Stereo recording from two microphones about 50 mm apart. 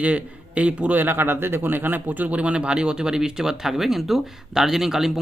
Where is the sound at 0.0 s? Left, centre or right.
Right.